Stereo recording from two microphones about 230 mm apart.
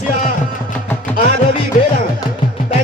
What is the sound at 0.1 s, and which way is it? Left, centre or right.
Music, left.